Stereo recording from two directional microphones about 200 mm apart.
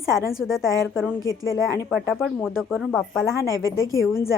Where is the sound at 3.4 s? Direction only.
15° right (ahead or behind).